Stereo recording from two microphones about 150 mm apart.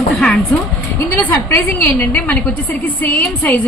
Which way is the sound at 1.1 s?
15° left (ahead or behind).